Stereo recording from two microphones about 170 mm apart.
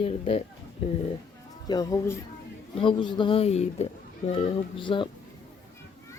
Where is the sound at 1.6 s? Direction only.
20° left (ahead or behind).